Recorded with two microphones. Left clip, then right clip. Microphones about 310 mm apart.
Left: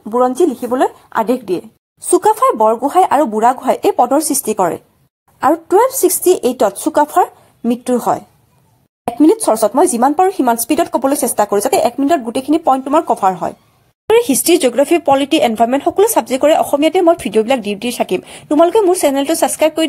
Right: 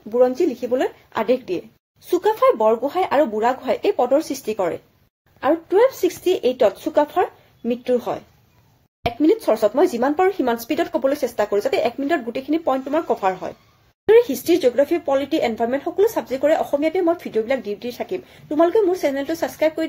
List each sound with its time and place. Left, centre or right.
0.8 s a woman's voice: left
9.2 s speech: left